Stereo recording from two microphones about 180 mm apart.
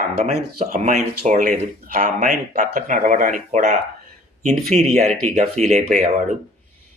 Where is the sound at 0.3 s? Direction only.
40° right (ahead or behind).